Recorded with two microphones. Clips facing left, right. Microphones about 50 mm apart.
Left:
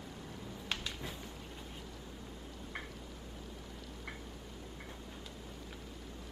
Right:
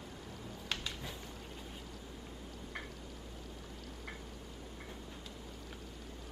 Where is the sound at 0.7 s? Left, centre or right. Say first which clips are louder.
Even; centre.